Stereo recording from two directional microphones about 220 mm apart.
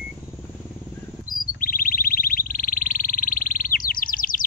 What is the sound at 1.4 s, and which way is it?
Wild animals, 40° left (ahead or behind).